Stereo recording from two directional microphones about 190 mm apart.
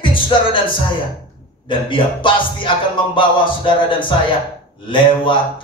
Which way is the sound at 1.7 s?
25° left (ahead or behind).